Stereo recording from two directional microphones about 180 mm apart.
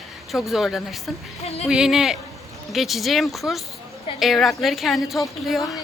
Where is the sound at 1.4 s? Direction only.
35° left (ahead or behind).